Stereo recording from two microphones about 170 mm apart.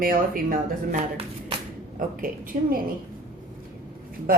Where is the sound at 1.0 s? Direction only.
35° right (ahead or behind).